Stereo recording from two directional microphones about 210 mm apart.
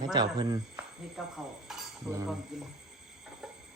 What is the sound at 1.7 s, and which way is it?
Cutlery, centre (ahead or behind).